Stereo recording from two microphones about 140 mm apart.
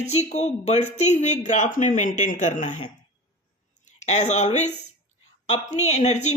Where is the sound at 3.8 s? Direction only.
55° left (ahead or behind).